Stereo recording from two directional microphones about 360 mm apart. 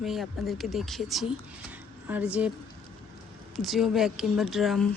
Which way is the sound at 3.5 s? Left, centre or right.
Centre.